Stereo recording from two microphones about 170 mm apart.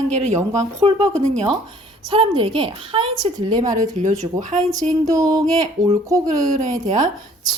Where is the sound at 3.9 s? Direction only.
45° right (ahead or behind).